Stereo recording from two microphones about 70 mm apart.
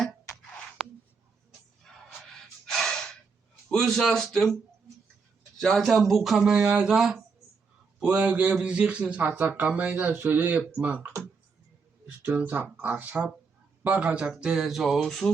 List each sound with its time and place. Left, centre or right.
2.6 s gasp: centre
3.7 s speech: centre
5.5 s speech: centre
6.4 s speech: centre
12.4 s speech: right; by 15.3 s centre